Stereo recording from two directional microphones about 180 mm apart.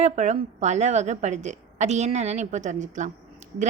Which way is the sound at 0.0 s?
40° right (ahead or behind).